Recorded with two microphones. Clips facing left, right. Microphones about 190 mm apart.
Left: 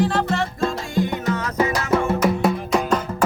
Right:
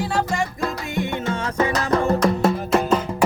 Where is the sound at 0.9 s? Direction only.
25° right (ahead or behind).